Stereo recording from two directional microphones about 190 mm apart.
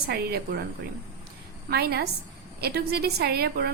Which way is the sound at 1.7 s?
55° right (ahead or behind).